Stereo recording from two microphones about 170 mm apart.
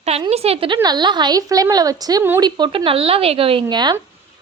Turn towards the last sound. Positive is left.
turn(degrees=-25)  # may be behind; listen again after turning